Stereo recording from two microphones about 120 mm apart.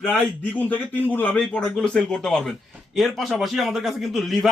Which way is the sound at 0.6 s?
15° left (ahead or behind).